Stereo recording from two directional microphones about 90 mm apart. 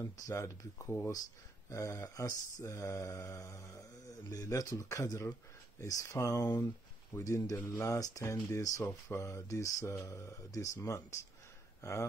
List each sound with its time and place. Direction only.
0.0 s mantra: 35° left (ahead or behind)
11.8 s speech: 35° left (ahead or behind)